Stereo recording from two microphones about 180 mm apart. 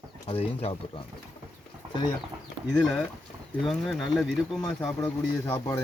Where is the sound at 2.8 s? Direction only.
5° left (ahead or behind).